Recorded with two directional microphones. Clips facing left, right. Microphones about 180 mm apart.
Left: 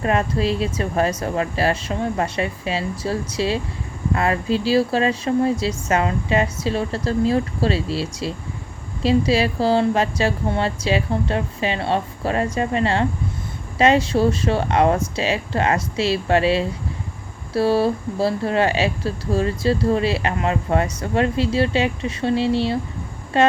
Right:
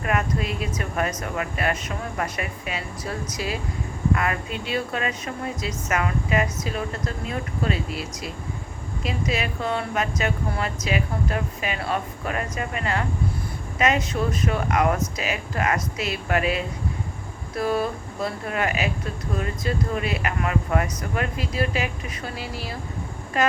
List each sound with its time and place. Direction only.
0.0 s speech: 30° left (ahead or behind)